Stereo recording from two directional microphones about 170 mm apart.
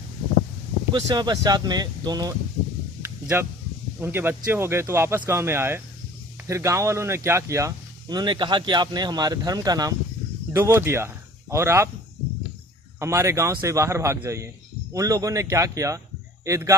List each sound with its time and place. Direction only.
0.9 s speech: 25° right (ahead or behind)
3.0 s a sound: 15° right (ahead or behind)
4.0 s speech: 15° right (ahead or behind)
13.0 s speech: 15° right (ahead or behind)